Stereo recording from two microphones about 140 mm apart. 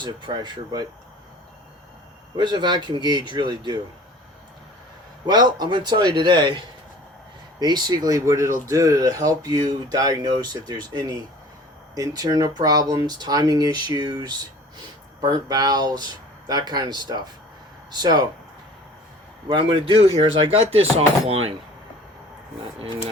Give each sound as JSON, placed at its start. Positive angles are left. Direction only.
{"t": 0.0, "sound": "a man's voice", "side_deg": -30}
{"t": 2.3, "sound": "a man's voice", "side_deg": -30}
{"t": 5.2, "sound": "a man's voice", "side_deg": -30}
{"t": 7.6, "sound": "speech", "side_deg": -30}
{"t": 19.5, "sound": "a man's voice", "side_deg": -35}